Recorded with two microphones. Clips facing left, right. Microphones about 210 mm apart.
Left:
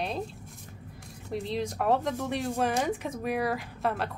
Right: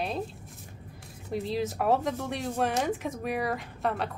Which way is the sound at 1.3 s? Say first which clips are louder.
Right 1 dB; centre (ahead or behind).